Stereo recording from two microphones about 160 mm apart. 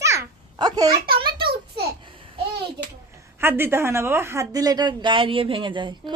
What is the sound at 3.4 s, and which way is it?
A woman's voice, 15° right (ahead or behind).